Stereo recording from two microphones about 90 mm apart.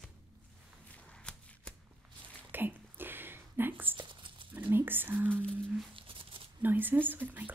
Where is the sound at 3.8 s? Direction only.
65° right (ahead or behind).